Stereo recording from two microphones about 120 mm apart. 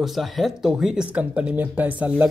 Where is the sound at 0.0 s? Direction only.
Centre (ahead or behind).